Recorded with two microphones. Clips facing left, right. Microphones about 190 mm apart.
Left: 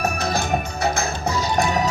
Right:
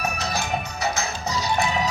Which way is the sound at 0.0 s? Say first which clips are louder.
Left 4 dB; 50° left (ahead or behind).